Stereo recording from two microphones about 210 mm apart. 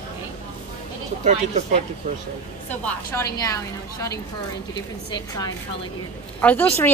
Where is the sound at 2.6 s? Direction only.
10° left (ahead or behind).